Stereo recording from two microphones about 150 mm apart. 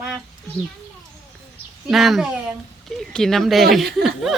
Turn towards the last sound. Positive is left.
turn(degrees=0)  # may be behind; listen again after turning